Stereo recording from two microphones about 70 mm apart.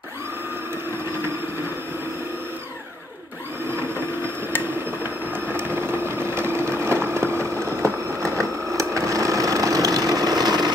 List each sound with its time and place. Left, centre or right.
5.5 s vehicle: right